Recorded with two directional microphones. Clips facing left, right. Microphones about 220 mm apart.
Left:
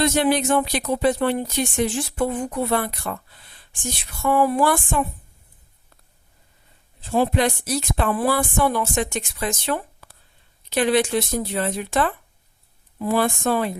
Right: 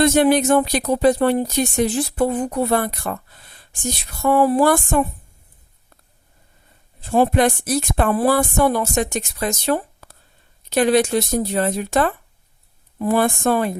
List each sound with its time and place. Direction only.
0.0 s speech: 50° right (ahead or behind)
7.0 s speech: 50° right (ahead or behind)